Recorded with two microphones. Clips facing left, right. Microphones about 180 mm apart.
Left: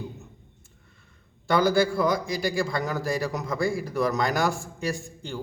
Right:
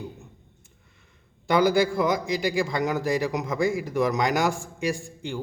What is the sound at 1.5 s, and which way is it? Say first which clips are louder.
A man's voice: right 1 dB; 20° right (ahead or behind).